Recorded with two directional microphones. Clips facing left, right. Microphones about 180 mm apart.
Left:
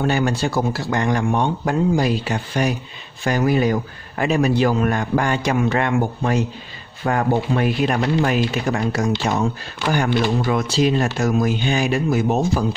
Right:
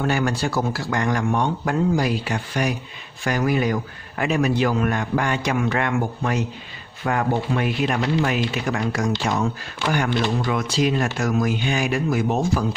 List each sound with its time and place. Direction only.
0.0 s a man's voice: 25° left (ahead or behind)
10.4 s speech: 30° left (ahead or behind)